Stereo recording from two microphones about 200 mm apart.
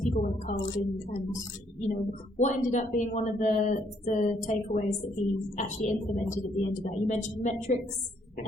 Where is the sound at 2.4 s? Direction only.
40° left (ahead or behind).